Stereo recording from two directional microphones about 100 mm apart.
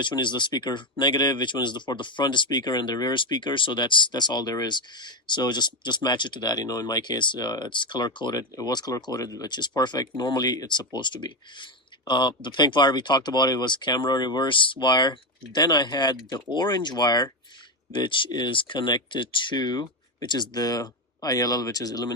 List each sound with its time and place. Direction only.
0.0 s speech: 50° left (ahead or behind)